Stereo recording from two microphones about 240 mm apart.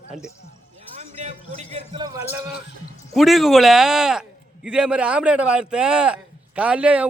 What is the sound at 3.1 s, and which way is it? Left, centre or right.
A man's voice, centre.